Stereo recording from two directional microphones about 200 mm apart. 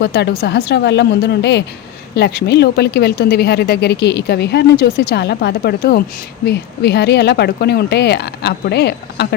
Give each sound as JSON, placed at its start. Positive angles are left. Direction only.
{"t": 0.0, "sound": "a woman's voice", "side_deg": 55}